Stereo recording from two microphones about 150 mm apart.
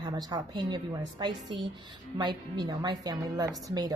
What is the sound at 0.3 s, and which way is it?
A woman's voice, 30° right (ahead or behind).